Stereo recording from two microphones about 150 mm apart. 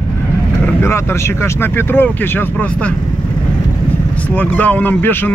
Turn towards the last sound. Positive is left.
turn(degrees=10)  # may be behind; listen again after turning